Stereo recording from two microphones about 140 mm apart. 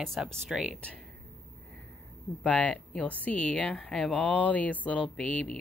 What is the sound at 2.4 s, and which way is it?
Speech, 10° left (ahead or behind).